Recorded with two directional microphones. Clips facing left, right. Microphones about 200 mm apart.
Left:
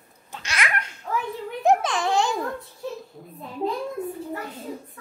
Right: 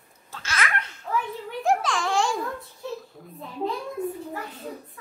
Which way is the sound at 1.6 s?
20° left (ahead or behind).